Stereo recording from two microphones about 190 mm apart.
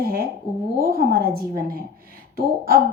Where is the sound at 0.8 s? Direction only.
50° right (ahead or behind).